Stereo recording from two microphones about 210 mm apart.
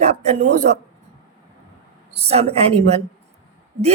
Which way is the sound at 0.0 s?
30° right (ahead or behind).